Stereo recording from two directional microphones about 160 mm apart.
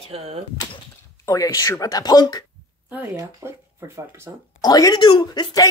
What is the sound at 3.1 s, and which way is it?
Speech, 15° right (ahead or behind).